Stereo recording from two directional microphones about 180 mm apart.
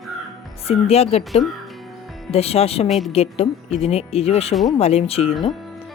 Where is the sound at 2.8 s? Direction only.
Centre (ahead or behind).